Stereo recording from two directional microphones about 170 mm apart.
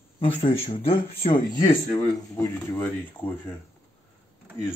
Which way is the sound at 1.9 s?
20° left (ahead or behind).